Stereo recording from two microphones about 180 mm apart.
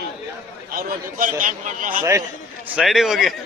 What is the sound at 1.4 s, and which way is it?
Speech, 45° right (ahead or behind).